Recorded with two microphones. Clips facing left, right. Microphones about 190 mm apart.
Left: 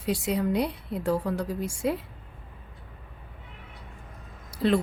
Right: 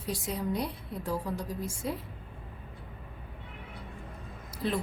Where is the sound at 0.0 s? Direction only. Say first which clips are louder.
Left 7 dB; 70° left (ahead or behind).